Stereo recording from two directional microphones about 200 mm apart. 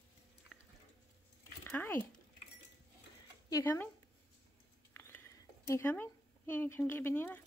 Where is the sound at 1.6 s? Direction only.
10° left (ahead or behind).